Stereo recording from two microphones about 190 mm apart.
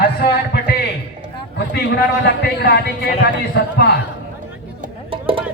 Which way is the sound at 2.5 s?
60° left (ahead or behind).